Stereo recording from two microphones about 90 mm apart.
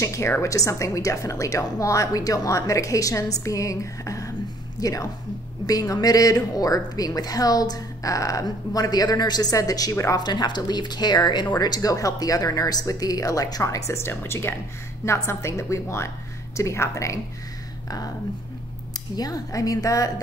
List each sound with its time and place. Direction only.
0.0 s a woman's voice: 35° left (ahead or behind)
10.2 s a woman's voice: 55° left (ahead or behind)
19.1 s a woman's voice: 45° left (ahead or behind)